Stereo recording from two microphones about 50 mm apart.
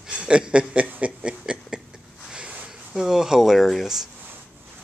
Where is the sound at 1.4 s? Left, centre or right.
Centre.